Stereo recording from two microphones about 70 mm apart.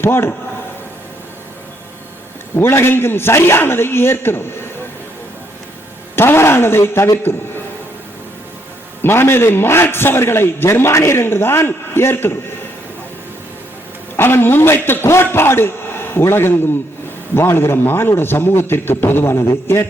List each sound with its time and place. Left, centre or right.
0.0 s a man's voice: left
2.6 s a man's voice: left
6.1 s speech: left
9.0 s a man's voice: left
14.2 s a man's voice: left